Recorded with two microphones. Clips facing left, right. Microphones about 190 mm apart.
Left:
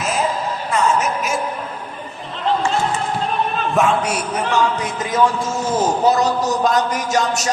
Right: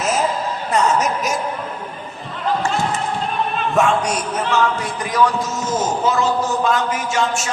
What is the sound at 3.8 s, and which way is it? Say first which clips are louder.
Speech: even; 5° left (ahead or behind).